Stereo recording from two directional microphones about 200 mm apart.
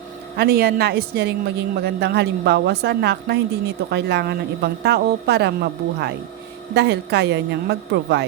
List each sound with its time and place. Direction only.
0.3 s a man's voice: 50° right (ahead or behind)